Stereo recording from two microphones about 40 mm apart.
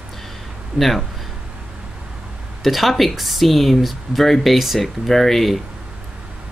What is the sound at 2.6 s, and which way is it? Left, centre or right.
Speech, centre.